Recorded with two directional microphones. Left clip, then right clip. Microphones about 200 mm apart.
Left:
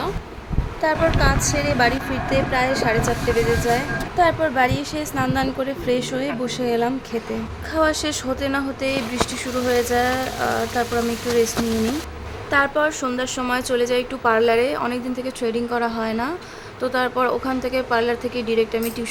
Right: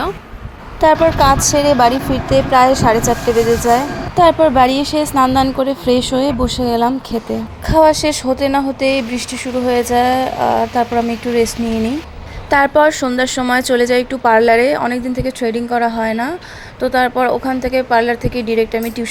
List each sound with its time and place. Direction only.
0.8 s a woman's voice: 35° right (ahead or behind)
12.5 s a woman's voice: 30° right (ahead or behind)